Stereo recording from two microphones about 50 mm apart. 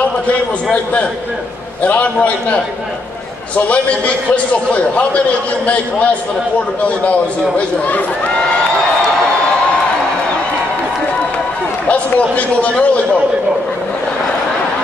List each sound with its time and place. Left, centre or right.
1.8 s a man's voice: left
3.6 s a man's voice: left
6.8 s a man's voice: left
11.9 s a man's voice: left